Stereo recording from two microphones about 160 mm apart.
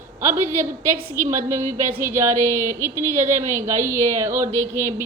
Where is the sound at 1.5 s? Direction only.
50° right (ahead or behind).